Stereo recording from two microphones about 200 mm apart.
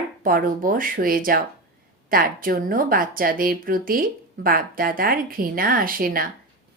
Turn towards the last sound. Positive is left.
turn(degrees=-45)  # may be behind; listen again after turning